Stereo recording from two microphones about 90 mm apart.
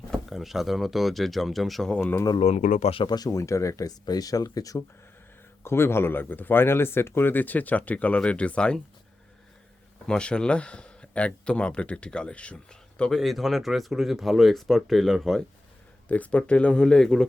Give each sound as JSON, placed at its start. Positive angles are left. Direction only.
{"t": 0.1, "sound": "speech", "side_deg": 0}
{"t": 3.1, "sound": "speech", "side_deg": 45}
{"t": 5.6, "sound": "speech", "side_deg": 25}
{"t": 10.1, "sound": "speech", "side_deg": 10}
{"t": 13.0, "sound": "speech", "side_deg": 5}
{"t": 16.0, "sound": "speech", "side_deg": 15}